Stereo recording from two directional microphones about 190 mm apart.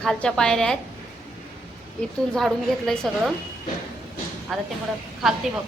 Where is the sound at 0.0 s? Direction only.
5° left (ahead or behind).